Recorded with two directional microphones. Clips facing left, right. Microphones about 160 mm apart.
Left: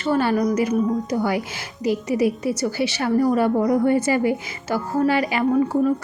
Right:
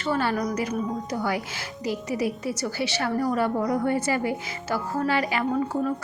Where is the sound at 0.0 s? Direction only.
15° left (ahead or behind).